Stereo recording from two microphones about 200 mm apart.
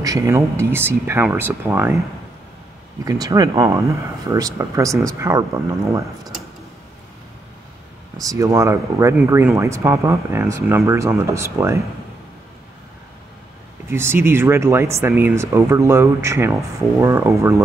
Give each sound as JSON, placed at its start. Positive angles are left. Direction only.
{"t": 0.0, "sound": "speech", "side_deg": -15}
{"t": 3.1, "sound": "speech", "side_deg": -20}
{"t": 8.2, "sound": "speech", "side_deg": -15}
{"t": 13.8, "sound": "speech", "side_deg": -10}